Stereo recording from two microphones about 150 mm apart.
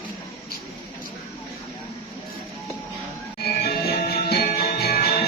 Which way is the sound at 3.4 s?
90° left.